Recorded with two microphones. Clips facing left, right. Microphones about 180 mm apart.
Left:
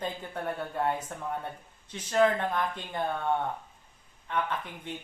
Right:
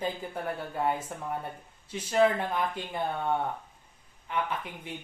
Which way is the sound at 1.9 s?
10° right (ahead or behind).